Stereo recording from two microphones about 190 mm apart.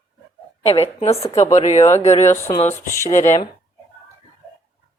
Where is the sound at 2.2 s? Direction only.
15° left (ahead or behind).